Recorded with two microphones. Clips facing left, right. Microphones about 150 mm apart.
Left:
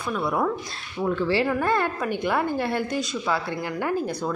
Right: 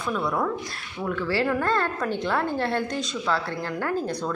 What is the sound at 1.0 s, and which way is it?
A woman's voice, 25° left (ahead or behind).